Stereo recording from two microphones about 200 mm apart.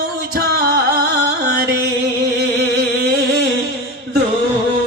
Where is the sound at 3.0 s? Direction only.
50° right (ahead or behind).